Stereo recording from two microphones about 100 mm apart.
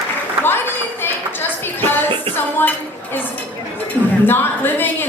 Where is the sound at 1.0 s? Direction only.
20° left (ahead or behind).